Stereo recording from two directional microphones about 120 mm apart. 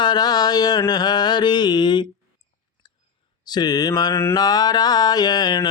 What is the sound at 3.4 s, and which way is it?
Mantra, 35° left (ahead or behind).